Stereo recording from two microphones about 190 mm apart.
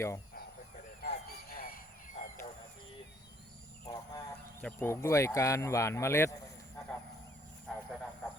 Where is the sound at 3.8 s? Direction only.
20° left (ahead or behind).